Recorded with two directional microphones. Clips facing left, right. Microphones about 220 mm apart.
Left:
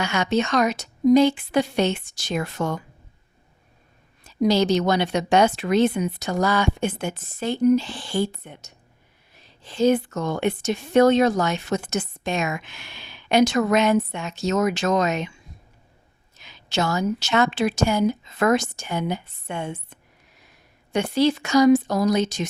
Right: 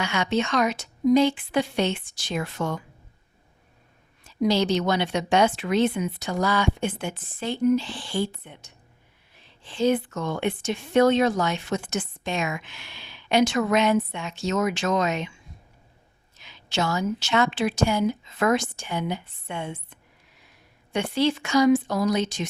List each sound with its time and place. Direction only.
0.0 s speech: 45° left (ahead or behind)
4.2 s a woman's voice: 40° left (ahead or behind)
16.4 s a woman's voice: 40° left (ahead or behind)